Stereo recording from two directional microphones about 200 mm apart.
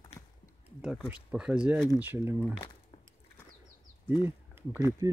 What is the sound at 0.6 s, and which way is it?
Speech, centre (ahead or behind).